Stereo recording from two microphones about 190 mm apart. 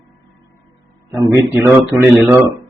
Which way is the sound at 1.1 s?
15° right (ahead or behind).